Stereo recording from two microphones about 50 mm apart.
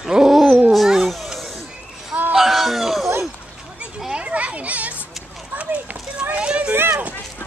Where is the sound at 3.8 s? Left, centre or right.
Centre.